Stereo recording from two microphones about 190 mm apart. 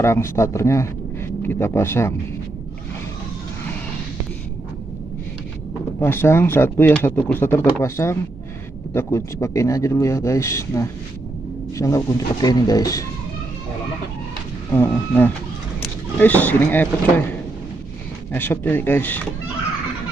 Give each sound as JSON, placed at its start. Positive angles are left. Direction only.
{"t": 0.0, "sound": "a man's voice", "side_deg": 15}
{"t": 5.9, "sound": "speech", "side_deg": 10}
{"t": 14.7, "sound": "speech", "side_deg": 10}
{"t": 18.3, "sound": "speech", "side_deg": 10}